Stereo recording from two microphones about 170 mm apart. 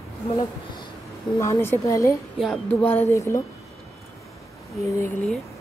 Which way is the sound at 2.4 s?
5° left (ahead or behind).